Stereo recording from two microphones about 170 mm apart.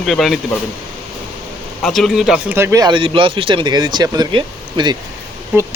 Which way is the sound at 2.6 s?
20° right (ahead or behind).